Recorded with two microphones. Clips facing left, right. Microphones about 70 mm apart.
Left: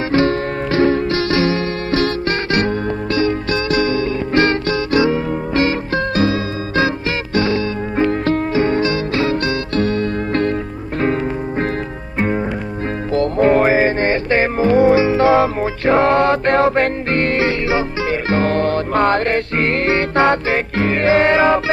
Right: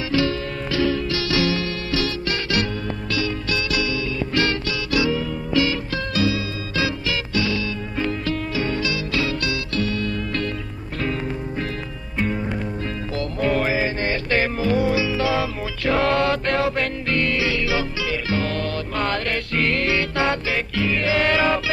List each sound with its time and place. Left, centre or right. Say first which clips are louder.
0.1 s music: left 6 dB; left
13.1 s music: left 9 dB; left